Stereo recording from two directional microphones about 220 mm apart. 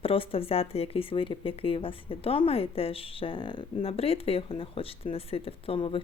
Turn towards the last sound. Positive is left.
turn(degrees=25)  # may be behind; listen again after turning